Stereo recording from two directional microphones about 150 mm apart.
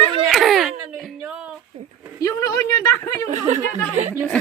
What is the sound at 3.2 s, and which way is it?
Speech, 50° right (ahead or behind).